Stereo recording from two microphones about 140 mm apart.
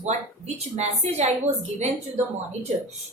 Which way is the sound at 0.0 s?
50° right (ahead or behind).